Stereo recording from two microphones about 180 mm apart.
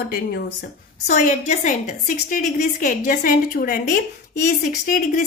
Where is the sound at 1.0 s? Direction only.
40° left (ahead or behind).